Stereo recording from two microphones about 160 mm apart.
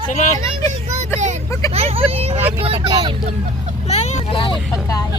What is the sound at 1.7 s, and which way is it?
Speech, 40° right (ahead or behind).